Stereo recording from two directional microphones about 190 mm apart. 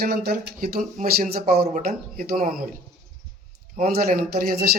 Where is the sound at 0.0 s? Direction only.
55° right (ahead or behind).